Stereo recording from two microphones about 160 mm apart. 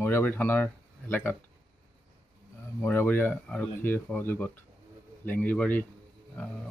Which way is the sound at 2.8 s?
10° left (ahead or behind).